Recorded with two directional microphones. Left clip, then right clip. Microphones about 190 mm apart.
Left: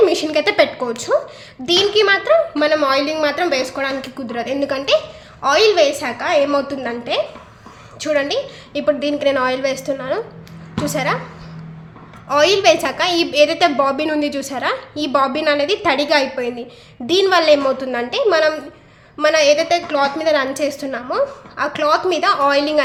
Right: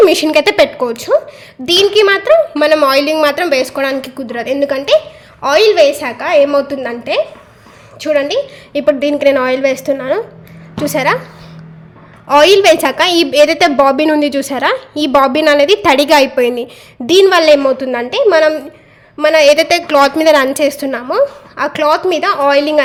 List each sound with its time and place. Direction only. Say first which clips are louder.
0.0 s a woman's voice: right 7 dB; 45° right (ahead or behind)
12.3 s a woman's voice: right 6 dB; 40° right (ahead or behind)